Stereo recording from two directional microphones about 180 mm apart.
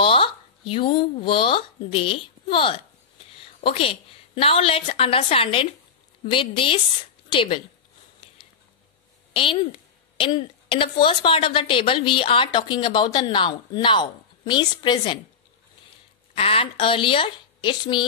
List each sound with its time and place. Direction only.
0.0 s a woman's voice: 30° left (ahead or behind)
9.3 s a woman's voice: 30° left (ahead or behind)
16.3 s a woman's voice: 30° left (ahead or behind)